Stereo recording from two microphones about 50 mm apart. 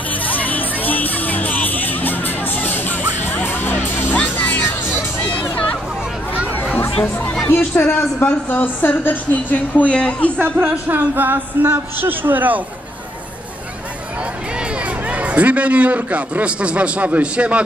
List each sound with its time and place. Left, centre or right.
0.1 s music: left
4.1 s music: left
7.4 s speech: left
8.2 s a woman's voice: left
9.9 s speech: left
10.3 s a man's voice: right
14.8 s a man's voice: right